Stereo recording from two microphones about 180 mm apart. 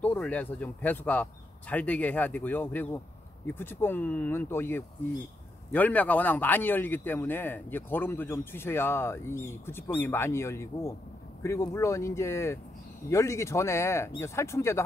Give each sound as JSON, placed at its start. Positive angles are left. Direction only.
{"t": 0.0, "sound": "speech", "side_deg": 10}